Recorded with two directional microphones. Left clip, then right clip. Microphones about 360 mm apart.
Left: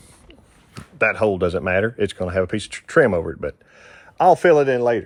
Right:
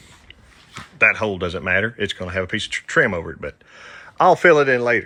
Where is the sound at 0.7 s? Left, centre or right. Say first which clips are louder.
Right 3 dB; centre.